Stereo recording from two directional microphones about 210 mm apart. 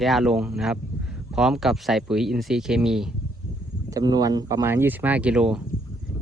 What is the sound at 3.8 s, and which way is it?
Speech, 15° right (ahead or behind).